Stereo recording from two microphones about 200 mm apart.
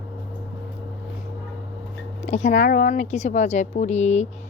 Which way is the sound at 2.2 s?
35° left (ahead or behind).